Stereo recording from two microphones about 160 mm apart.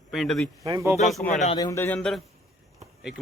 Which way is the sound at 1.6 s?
20° left (ahead or behind).